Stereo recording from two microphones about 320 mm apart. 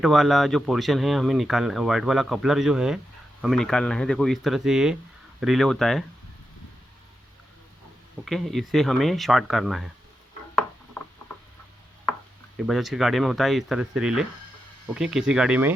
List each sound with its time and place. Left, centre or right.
0.0 s speech: centre
8.2 s speech: centre
12.5 s speech: centre